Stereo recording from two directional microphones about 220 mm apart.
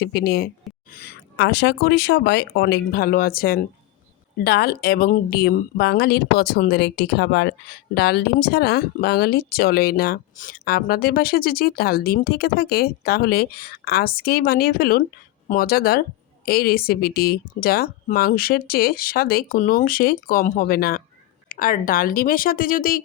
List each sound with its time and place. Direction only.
0.0 s speech: 45° left (ahead or behind)